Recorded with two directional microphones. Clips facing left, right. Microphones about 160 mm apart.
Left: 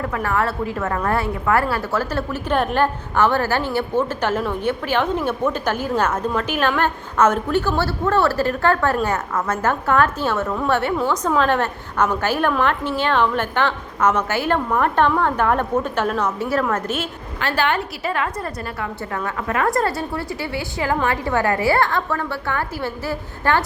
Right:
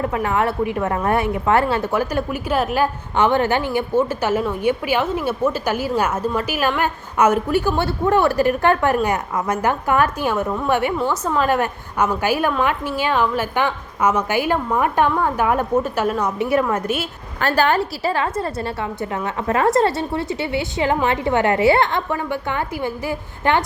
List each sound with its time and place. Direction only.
0.0 s a woman's voice: 20° right (ahead or behind)
17.4 s a woman's voice: 40° right (ahead or behind); by 23.6 s 20° right (ahead or behind)